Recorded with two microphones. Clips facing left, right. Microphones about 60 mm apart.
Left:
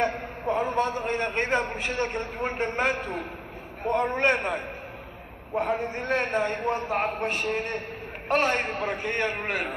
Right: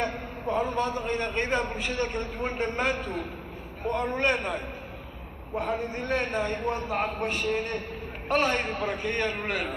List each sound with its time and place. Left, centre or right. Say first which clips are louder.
0.0 s a man's voice: left 3 dB; left